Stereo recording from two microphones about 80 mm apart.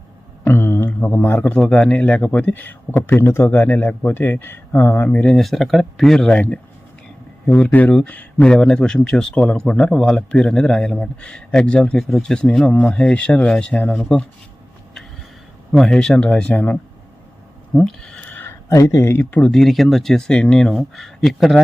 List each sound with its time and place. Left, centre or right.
0.4 s a sound: left
1.4 s speech: centre; by 3.5 s left
3.5 s speech: left
15.7 s speech: centre
17.7 s a sound: centre
18.7 s speech: left
19.2 s speech: centre
19.5 s speech: centre